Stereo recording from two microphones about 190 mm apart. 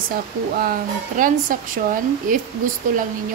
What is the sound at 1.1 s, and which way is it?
Speech, 45° right (ahead or behind).